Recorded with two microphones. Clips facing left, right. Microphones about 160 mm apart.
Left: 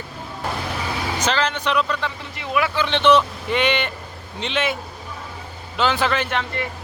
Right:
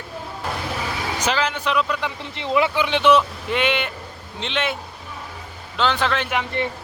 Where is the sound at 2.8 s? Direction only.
5° right (ahead or behind).